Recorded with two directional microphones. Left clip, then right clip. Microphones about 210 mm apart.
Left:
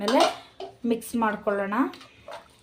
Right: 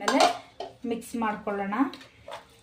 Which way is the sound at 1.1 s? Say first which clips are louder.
Left 4 dB; 45° left (ahead or behind).